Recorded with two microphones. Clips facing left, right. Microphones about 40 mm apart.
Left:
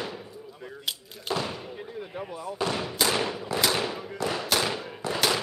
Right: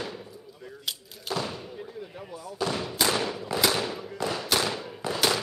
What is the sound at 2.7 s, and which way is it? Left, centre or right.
Speech, centre.